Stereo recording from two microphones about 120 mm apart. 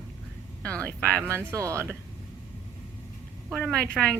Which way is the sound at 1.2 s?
20° right (ahead or behind).